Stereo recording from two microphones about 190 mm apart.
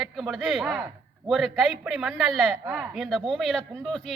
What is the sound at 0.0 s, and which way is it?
Speech, centre (ahead or behind).